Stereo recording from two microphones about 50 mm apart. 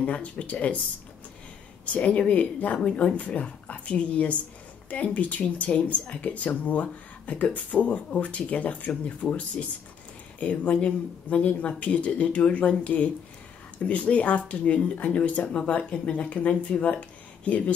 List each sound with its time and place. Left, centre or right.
0.0 s speech: left
1.9 s speech: left